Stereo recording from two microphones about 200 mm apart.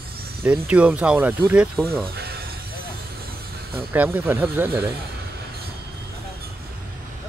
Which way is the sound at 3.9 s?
10° right (ahead or behind).